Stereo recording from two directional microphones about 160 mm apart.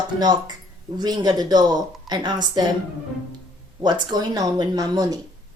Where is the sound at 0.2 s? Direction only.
25° right (ahead or behind).